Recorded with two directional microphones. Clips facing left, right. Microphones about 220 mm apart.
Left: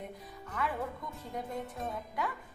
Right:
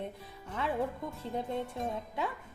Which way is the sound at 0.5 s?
25° right (ahead or behind).